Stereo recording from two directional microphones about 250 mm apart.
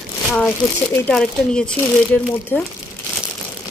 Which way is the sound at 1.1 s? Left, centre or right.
Centre.